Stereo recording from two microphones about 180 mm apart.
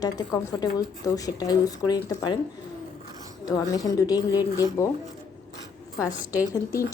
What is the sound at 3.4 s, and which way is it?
A woman's voice, 20° left (ahead or behind).